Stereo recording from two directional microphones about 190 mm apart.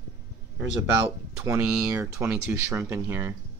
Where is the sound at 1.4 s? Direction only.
15° right (ahead or behind).